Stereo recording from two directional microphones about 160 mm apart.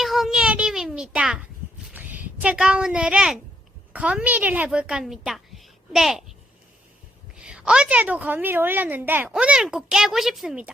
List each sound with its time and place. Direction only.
0.0 s child singing: centre (ahead or behind)
1.1 s a child's voice: 5° right (ahead or behind)
7.3 s a woman's voice: 5° right (ahead or behind)